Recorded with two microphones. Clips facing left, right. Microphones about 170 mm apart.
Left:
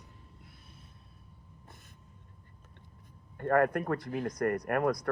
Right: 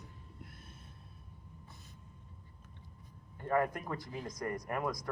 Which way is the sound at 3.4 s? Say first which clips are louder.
Left 6 dB; 60° left (ahead or behind).